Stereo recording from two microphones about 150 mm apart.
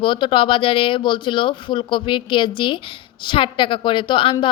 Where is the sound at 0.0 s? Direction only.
35° left (ahead or behind).